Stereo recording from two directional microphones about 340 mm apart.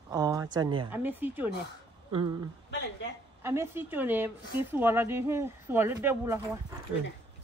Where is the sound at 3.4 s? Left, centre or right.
Centre.